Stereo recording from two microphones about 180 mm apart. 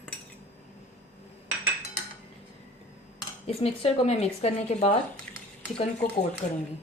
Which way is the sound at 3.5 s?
35° left (ahead or behind).